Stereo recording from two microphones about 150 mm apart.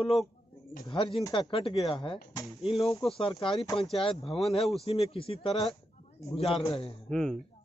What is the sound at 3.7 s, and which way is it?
Speech, 40° left (ahead or behind).